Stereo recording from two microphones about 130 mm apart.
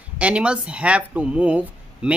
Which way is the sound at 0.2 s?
10° right (ahead or behind).